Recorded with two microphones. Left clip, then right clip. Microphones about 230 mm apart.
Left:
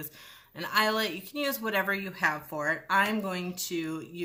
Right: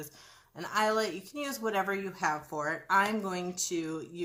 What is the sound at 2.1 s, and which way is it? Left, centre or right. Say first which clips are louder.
Speech: left 3 dB; left.